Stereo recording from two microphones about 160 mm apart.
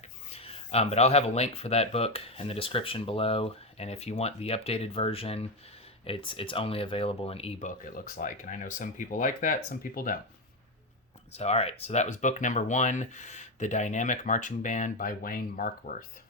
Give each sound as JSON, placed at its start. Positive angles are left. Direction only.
{"t": 0.3, "sound": "speech", "side_deg": 40}
{"t": 7.9, "sound": "speech", "side_deg": 65}
{"t": 11.3, "sound": "speech", "side_deg": 40}